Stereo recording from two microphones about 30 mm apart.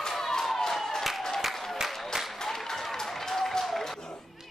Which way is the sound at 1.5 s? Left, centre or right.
Centre.